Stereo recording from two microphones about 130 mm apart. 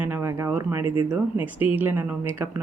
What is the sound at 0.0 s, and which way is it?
Speech, 15° right (ahead or behind).